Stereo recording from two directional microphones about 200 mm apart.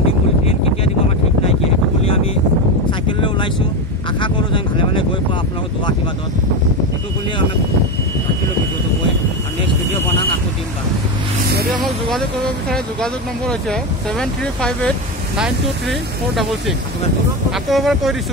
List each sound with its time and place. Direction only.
3.1 s a sound: 25° left (ahead or behind)
4.2 s vehicle: 25° left (ahead or behind)
12.6 s speech: 5° left (ahead or behind)